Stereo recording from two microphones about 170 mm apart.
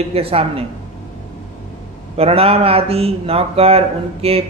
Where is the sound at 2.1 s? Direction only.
35° right (ahead or behind).